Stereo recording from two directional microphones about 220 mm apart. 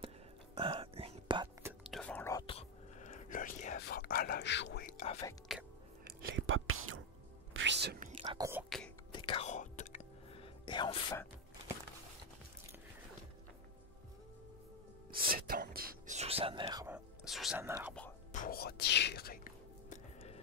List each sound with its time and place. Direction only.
0.6 s whispering: 25° right (ahead or behind)
1.9 s whispering: 5° left (ahead or behind)
2.4 s whispering: 25° left (ahead or behind); by 4.8 s 55° left (ahead or behind)
4.8 s whispering: 35° left (ahead or behind)
5.5 s chewing: centre (ahead or behind)
6.0 s whispering: 50° right (ahead or behind)
7.5 s whispering: 55° right (ahead or behind)
8.1 s whispering: 25° right (ahead or behind)
8.6 s a sound: centre (ahead or behind)
9.1 s whispering: 25° left (ahead or behind)
15.0 s whispering: 40° right (ahead or behind)
16.2 s whispering: 25° right (ahead or behind)
17.3 s whispering: centre (ahead or behind)
18.3 s whispering: 40° left (ahead or behind)